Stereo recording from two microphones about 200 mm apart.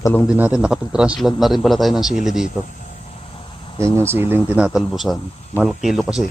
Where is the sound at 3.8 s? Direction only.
10° right (ahead or behind).